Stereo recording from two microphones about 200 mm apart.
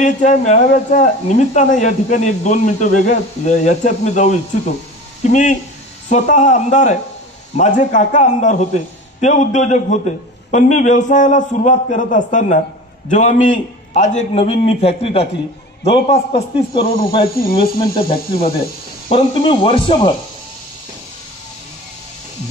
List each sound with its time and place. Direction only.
0.0 s a man's voice: 35° left (ahead or behind)
19.0 s speech: 30° left (ahead or behind)